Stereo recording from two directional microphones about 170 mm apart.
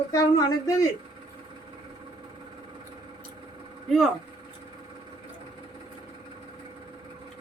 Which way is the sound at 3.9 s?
Centre (ahead or behind).